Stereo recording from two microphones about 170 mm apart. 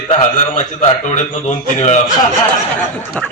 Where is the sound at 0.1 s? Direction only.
40° left (ahead or behind).